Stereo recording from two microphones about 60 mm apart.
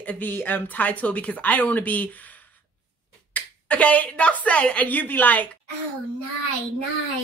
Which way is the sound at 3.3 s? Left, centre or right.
Left.